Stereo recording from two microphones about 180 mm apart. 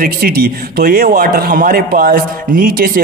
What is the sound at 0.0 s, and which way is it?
A man's voice, 55° right (ahead or behind).